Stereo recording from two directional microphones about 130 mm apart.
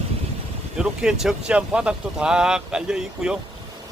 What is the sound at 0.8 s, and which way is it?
Speech, 5° right (ahead or behind).